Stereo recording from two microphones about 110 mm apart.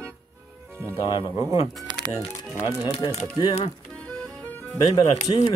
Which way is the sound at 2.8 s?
55° left (ahead or behind).